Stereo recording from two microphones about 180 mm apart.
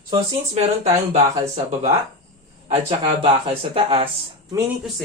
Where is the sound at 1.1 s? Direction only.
40° right (ahead or behind).